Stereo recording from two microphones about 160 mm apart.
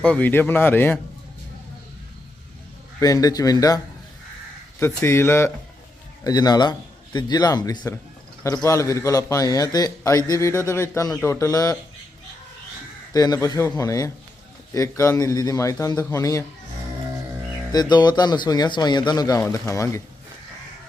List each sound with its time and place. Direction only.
0.0 s speech: 10° left (ahead or behind)
3.0 s speech: 20° left (ahead or behind)
4.8 s speech: 15° left (ahead or behind)
13.1 s speech: 25° left (ahead or behind)
17.7 s speech: 25° left (ahead or behind)